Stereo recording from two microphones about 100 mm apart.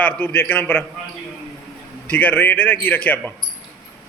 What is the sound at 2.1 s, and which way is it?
Speech, 15° left (ahead or behind).